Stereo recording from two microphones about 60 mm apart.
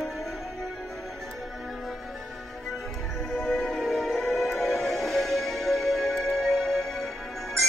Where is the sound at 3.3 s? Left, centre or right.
Centre.